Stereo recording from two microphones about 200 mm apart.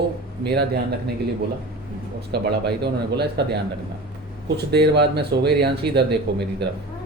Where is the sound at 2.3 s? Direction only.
55° right (ahead or behind).